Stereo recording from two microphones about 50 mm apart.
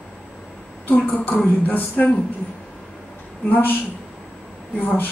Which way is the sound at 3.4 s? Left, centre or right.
Left.